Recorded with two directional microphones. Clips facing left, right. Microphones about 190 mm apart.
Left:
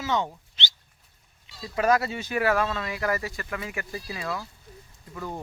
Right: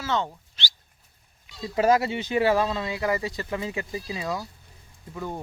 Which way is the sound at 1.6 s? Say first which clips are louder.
Right 2 dB; 25° right (ahead or behind).